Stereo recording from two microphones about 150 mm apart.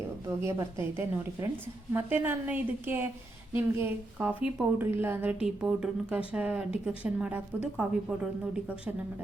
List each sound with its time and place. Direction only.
0.3 s a woman's voice: 20° right (ahead or behind)